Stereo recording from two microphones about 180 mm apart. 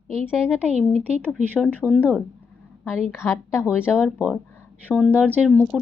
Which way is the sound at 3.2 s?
15° left (ahead or behind).